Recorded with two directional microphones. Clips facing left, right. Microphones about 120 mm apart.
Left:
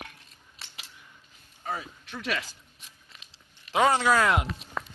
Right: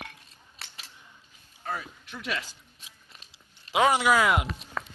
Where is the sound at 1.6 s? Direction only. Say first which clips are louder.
Even; 20° left (ahead or behind).